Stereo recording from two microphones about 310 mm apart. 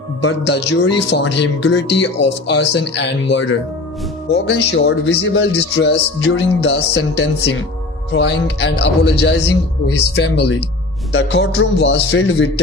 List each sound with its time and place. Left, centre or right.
0.2 s speech: left